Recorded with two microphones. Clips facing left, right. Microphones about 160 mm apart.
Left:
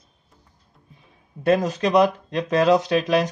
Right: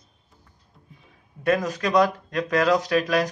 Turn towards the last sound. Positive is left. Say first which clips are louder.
# left 2 dB
turn(degrees=25)  # may be behind; listen again after turning